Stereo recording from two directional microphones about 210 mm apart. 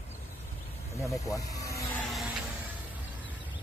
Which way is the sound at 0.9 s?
15° left (ahead or behind).